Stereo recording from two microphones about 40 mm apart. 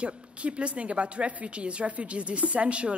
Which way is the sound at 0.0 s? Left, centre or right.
Right.